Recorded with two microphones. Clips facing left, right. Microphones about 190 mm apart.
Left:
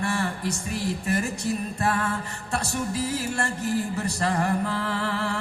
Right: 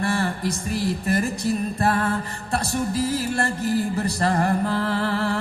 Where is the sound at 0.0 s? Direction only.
35° right (ahead or behind).